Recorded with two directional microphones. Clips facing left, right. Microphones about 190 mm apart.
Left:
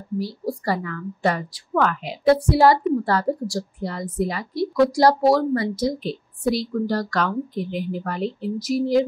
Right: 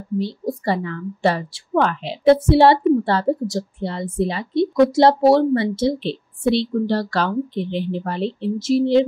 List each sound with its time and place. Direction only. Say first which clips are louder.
0.2 s a woman's voice: right 1 dB; 25° right (ahead or behind)